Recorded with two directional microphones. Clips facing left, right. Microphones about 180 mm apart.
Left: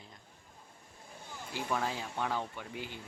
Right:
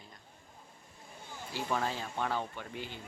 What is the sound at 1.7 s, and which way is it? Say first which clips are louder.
Speech: right 1 dB; 10° left (ahead or behind).